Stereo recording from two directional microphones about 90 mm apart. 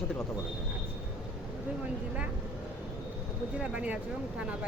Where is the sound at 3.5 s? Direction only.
15° right (ahead or behind).